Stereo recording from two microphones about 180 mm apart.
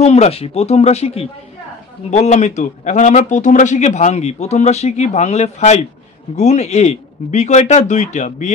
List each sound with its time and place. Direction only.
0.0 s a man's voice: 35° left (ahead or behind)